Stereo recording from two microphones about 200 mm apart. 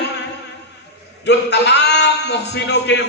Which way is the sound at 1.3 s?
60° left (ahead or behind).